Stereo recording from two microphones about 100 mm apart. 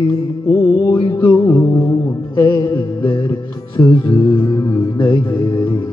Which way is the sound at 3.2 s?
30° left (ahead or behind).